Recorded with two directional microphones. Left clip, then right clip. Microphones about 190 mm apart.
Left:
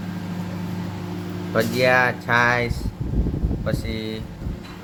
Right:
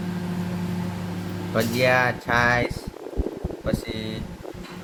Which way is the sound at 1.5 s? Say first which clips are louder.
Left 2 dB; 10° left (ahead or behind).